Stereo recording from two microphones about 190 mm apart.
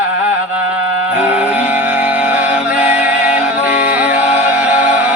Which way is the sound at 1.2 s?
5° right (ahead or behind).